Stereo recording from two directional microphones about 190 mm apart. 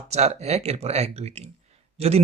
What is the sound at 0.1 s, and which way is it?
A man's voice, 35° right (ahead or behind).